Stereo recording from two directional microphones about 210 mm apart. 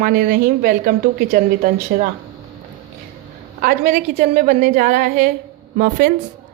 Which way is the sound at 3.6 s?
40° right (ahead or behind).